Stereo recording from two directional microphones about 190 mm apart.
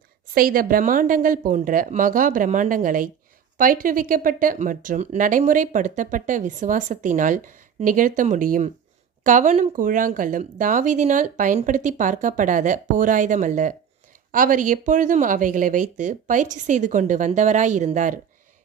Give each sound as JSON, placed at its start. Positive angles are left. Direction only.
{"t": 0.3, "sound": "speech", "side_deg": -50}